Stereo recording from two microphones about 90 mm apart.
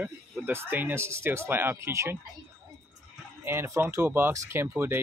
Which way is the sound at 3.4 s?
25° right (ahead or behind).